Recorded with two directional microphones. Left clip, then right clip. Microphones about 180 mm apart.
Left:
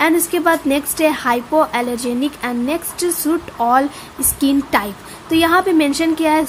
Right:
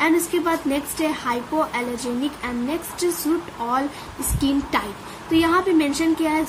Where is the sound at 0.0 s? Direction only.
50° left (ahead or behind).